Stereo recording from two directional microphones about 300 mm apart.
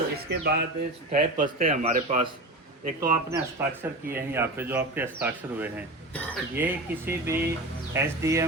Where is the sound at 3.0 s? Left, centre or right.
Centre.